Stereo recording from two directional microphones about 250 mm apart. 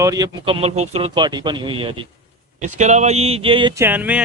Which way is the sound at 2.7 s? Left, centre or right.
Right.